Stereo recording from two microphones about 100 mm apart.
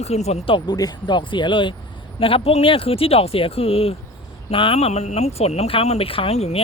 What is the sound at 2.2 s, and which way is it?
Speech, 70° left (ahead or behind).